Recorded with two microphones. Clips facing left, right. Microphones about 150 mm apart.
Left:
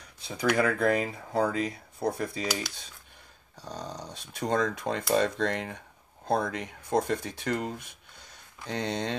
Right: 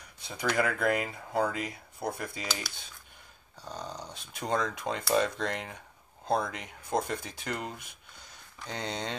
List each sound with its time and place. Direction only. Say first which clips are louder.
0.6 s speech: left 2 dB; 30° left (ahead or behind)
3.6 s speech: left 2 dB; 35° left (ahead or behind)